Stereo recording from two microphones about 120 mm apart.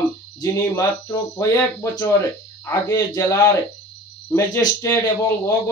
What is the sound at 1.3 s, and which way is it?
Speech, 25° left (ahead or behind).